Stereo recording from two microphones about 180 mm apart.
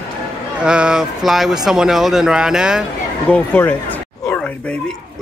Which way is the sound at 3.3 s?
10° left (ahead or behind).